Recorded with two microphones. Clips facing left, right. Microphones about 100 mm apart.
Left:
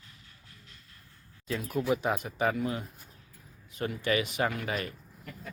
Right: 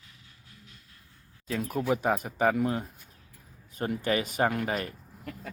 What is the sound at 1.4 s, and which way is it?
Speech, 45° right (ahead or behind).